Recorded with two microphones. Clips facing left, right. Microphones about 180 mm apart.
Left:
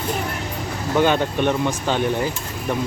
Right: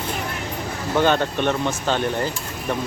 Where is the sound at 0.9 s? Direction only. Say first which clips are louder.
Left 1 dB; 10° left (ahead or behind).